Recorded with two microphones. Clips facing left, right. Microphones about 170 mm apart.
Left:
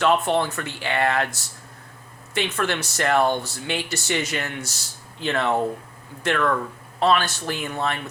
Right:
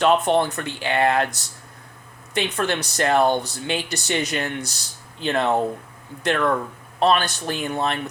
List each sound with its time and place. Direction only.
0.0 s speech: 20° right (ahead or behind)